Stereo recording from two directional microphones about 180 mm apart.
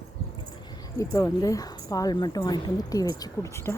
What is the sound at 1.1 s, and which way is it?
Speech, 20° left (ahead or behind).